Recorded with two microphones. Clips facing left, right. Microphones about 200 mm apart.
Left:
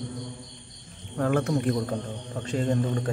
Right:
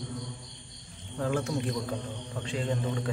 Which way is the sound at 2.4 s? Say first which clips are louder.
Left 6 dB; 45° left (ahead or behind).